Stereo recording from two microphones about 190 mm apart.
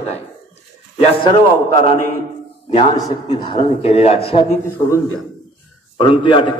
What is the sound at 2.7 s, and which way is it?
A man's voice, 20° left (ahead or behind).